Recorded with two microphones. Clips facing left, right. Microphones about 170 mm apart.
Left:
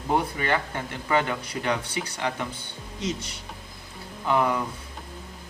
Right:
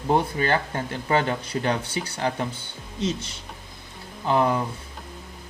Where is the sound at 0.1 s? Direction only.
30° right (ahead or behind).